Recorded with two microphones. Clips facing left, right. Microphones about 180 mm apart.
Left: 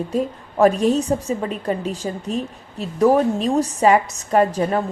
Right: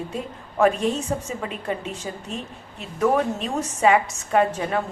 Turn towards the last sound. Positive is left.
turn(degrees=35)  # may be behind; listen again after turning